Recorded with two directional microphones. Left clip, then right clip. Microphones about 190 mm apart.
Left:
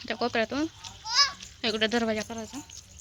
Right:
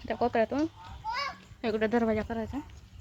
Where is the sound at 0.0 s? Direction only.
Centre (ahead or behind).